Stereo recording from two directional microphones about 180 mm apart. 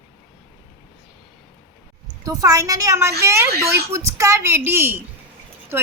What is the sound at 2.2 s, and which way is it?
A woman's voice, 15° right (ahead or behind).